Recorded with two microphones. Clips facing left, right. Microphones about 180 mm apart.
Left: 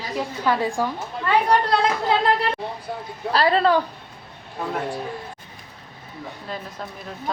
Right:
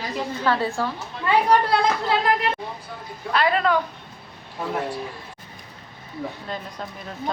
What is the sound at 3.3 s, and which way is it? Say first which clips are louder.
Speech: left 2 dB; 30° left (ahead or behind).